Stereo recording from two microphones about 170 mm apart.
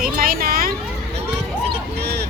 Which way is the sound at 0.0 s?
60° right (ahead or behind).